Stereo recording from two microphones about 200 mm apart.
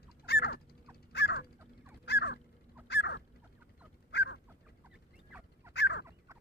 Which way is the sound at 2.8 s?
60° left (ahead or behind).